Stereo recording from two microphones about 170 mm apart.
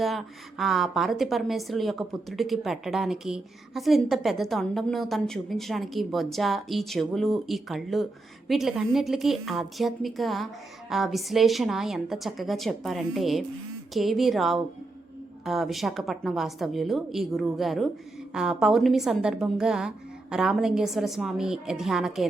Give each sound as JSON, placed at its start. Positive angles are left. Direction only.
{"t": 0.0, "sound": "a woman's voice", "side_deg": 0}